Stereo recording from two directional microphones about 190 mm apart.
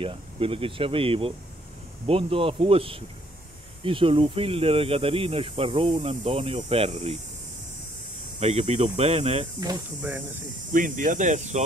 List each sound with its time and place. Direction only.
0.0 s speech: 30° right (ahead or behind)
8.4 s speech: 35° right (ahead or behind)
10.7 s speech: 45° right (ahead or behind)